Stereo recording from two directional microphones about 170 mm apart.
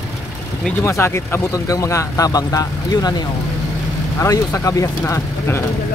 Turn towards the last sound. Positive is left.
turn(degrees=15)  # may be behind; listen again after turning